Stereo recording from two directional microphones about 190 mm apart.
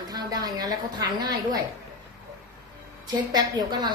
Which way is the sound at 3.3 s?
20° right (ahead or behind).